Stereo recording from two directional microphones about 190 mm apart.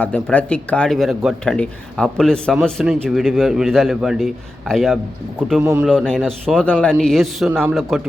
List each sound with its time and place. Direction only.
0.0 s a man's voice: 5° left (ahead or behind)